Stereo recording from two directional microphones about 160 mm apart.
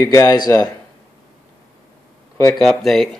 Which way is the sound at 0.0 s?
15° left (ahead or behind).